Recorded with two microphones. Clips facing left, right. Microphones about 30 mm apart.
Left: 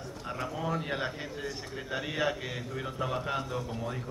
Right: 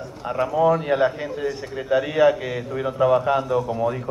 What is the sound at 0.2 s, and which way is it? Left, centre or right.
A man's voice, right.